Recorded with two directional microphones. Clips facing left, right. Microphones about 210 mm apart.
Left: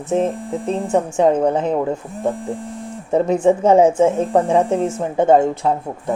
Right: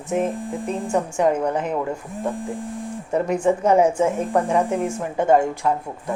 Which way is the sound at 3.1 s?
25° left (ahead or behind).